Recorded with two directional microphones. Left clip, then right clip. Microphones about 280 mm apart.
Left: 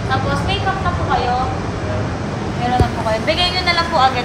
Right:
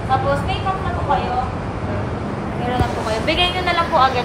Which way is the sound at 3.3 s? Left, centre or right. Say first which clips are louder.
Even; left.